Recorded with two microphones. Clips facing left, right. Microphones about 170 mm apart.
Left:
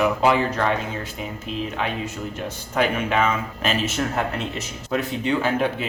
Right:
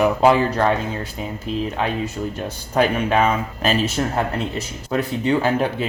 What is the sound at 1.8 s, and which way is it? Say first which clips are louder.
Speech: right 4 dB; 35° right (ahead or behind).